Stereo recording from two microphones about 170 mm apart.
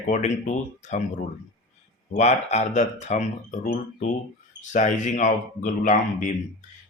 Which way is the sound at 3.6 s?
55° left (ahead or behind).